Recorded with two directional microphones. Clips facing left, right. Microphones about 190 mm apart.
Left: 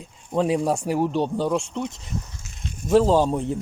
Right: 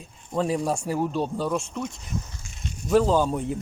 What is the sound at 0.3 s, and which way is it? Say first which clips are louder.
Speech: left 3 dB; 20° left (ahead or behind).